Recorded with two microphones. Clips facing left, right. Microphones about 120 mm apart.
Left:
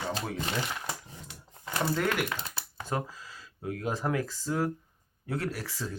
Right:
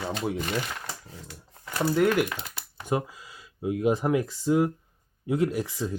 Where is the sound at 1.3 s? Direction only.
20° left (ahead or behind).